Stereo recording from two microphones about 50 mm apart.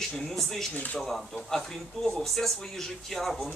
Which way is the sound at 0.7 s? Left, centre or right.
Left.